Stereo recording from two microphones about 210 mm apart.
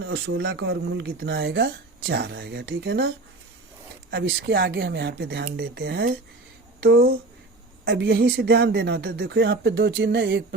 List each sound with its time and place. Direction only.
0.0 s speech: 50° right (ahead or behind)
2.3 s speech: 50° right (ahead or behind)
4.1 s speech: 55° right (ahead or behind)
7.9 s speech: 60° right (ahead or behind)